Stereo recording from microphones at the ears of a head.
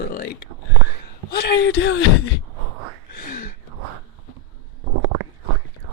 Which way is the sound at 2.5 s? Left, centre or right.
Right.